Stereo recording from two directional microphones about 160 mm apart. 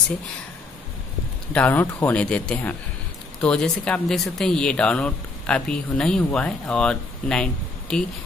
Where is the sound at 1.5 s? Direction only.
10° left (ahead or behind).